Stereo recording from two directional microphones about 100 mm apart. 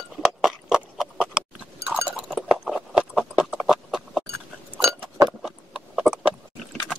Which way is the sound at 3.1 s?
10° right (ahead or behind).